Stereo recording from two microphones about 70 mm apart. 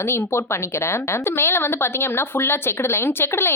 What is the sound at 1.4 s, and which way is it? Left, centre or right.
Speech, left.